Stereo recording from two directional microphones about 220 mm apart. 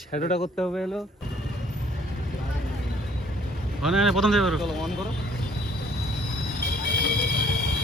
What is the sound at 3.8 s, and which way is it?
Speech, centre (ahead or behind).